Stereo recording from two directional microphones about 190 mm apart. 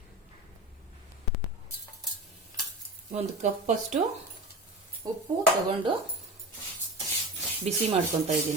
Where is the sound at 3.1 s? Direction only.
40° right (ahead or behind).